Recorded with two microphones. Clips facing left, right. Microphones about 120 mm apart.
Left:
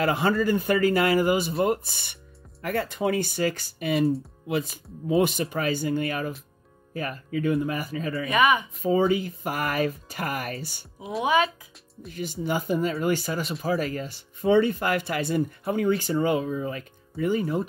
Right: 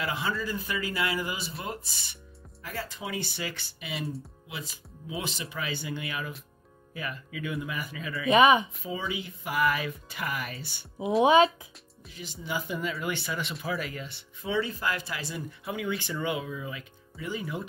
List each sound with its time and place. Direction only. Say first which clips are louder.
0.0 s speech: left 9 dB; 55° left (ahead or behind)
4.0 s speech: left 13 dB; centre (ahead or behind)
4.5 s speech: left 16 dB; 55° left (ahead or behind); by 8.3 s 40° left (ahead or behind)
8.3 s speech: right 2 dB; 25° right (ahead or behind)
8.8 s speech: left 12 dB; 45° left (ahead or behind)
11.2 s speech: right 2 dB; 25° right (ahead or behind)
12.1 s speech: left 7 dB; 50° left (ahead or behind)